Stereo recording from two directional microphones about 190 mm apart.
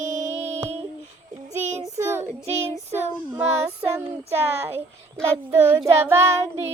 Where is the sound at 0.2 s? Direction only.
15° right (ahead or behind).